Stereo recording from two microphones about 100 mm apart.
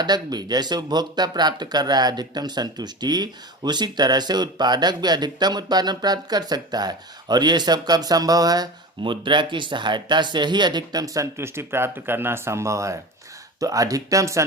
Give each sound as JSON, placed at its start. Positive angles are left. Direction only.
{"t": 0.0, "sound": "speech", "side_deg": -45}